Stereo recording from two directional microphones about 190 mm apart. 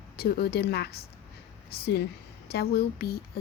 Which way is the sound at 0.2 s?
55° left (ahead or behind).